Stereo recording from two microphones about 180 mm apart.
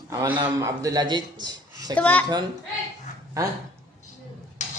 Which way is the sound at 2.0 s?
10° left (ahead or behind).